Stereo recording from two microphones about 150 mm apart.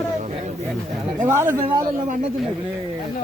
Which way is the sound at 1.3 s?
15° right (ahead or behind).